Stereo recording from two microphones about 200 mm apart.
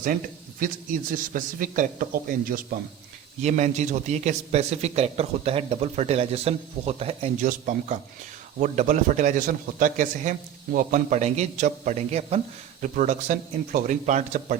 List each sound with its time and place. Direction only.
0.6 s a man's voice: 45° right (ahead or behind)
3.4 s a man's voice: 35° right (ahead or behind)